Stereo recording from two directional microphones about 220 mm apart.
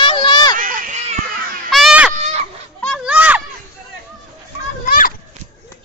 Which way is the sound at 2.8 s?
Centre (ahead or behind).